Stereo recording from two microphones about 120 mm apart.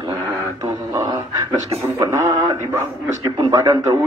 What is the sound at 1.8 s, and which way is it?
A man's voice, 25° right (ahead or behind).